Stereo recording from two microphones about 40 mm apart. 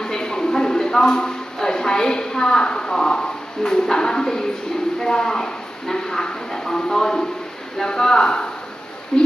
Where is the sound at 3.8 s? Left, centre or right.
Centre.